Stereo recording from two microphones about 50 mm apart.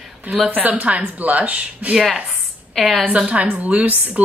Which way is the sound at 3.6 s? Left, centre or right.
Right.